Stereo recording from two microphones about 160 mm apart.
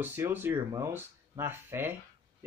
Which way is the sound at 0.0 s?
10° right (ahead or behind).